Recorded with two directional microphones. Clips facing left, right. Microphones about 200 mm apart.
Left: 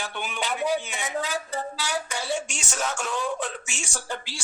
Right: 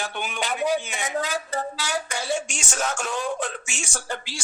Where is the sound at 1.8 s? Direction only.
45° right (ahead or behind).